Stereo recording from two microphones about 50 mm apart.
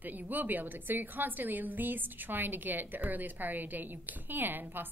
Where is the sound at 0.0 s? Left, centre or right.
Right.